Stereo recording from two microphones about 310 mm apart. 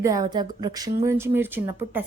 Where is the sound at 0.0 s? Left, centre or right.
Centre.